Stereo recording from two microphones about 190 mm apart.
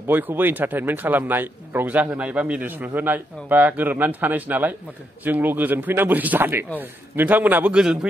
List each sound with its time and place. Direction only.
0.0 s speech: 10° right (ahead or behind)